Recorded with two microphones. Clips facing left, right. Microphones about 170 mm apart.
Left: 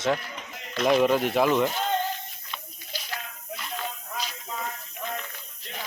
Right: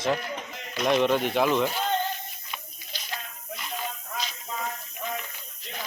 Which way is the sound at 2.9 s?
10° left (ahead or behind).